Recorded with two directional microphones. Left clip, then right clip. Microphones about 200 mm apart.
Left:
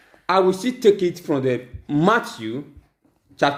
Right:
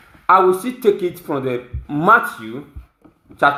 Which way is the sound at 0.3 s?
50° left (ahead or behind).